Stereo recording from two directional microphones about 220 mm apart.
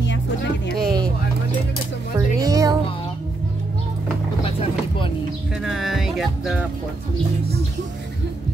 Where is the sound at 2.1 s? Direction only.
15° right (ahead or behind).